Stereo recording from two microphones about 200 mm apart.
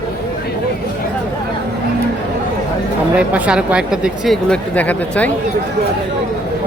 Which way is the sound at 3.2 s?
5° right (ahead or behind).